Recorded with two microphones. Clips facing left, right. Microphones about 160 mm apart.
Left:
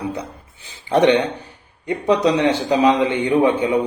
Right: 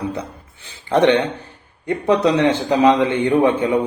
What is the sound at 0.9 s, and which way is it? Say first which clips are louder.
A man's voice: even; 15° left (ahead or behind).